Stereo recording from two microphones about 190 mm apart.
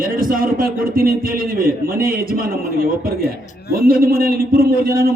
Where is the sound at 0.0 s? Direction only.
45° right (ahead or behind).